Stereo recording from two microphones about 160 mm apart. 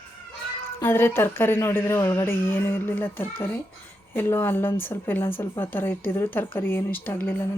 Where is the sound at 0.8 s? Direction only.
15° left (ahead or behind).